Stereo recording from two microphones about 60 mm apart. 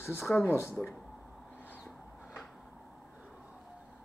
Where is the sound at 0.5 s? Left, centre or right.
Left.